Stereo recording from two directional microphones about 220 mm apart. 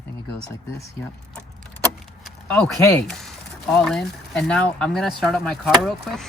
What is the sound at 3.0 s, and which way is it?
Speech, centre (ahead or behind).